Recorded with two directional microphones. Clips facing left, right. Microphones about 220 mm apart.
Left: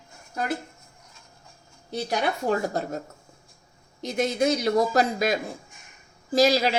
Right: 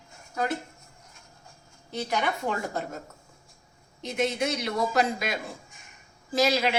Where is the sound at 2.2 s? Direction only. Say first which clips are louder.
Left 5 dB; 40° left (ahead or behind).